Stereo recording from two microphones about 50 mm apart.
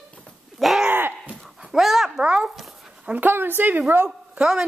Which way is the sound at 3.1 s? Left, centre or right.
Right.